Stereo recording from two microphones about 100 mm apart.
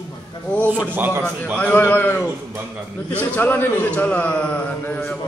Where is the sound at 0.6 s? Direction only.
15° right (ahead or behind).